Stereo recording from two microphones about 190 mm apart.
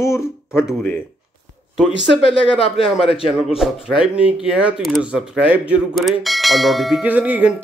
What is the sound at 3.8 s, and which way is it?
Speech, 5° right (ahead or behind).